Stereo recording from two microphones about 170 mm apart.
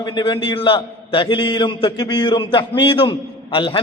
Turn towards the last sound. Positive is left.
turn(degrees=30)  # may be behind; listen again after turning